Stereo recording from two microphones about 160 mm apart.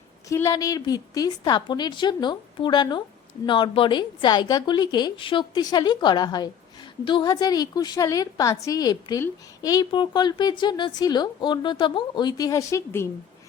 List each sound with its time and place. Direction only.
0.3 s speech: 20° left (ahead or behind)